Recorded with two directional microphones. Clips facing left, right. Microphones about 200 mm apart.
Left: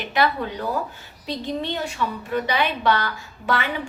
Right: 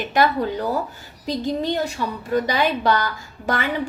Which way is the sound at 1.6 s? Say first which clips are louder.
Right 3 dB; 40° right (ahead or behind).